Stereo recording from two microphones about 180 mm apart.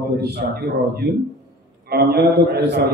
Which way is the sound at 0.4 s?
55° right (ahead or behind).